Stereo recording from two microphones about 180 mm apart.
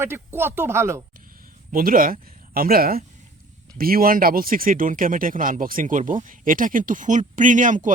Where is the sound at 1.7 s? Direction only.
50° right (ahead or behind).